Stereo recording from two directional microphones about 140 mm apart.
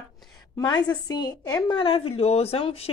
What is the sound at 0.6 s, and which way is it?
A woman's voice, 30° left (ahead or behind).